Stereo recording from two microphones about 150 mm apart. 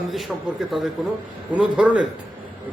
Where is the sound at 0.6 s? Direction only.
Centre (ahead or behind).